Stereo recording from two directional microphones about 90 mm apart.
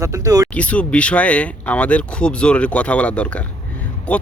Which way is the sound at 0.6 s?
15° left (ahead or behind).